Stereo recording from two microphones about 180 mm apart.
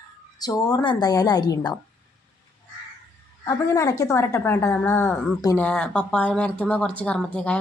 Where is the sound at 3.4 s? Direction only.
20° left (ahead or behind).